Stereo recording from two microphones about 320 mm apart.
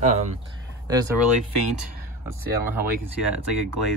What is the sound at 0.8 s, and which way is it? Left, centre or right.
Speech, centre.